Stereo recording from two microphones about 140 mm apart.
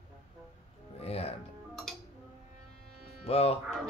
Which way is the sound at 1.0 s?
45° left (ahead or behind).